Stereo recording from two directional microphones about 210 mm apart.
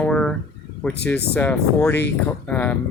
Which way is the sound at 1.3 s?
5° left (ahead or behind).